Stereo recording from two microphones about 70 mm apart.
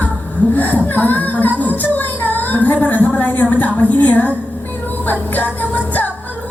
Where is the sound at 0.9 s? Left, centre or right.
Left.